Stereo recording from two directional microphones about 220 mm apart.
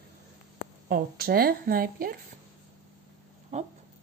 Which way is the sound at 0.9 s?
45° right (ahead or behind).